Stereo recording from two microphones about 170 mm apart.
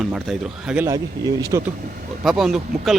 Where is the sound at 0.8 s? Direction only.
20° right (ahead or behind).